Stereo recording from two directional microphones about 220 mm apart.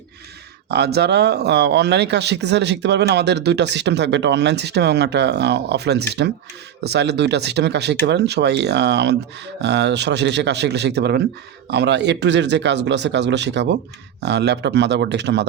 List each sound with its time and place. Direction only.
0.7 s speech: 45° right (ahead or behind)